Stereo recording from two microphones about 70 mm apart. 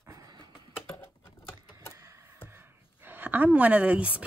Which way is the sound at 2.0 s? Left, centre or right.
Right.